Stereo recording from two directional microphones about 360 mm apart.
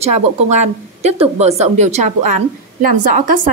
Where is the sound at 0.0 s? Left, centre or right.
Centre.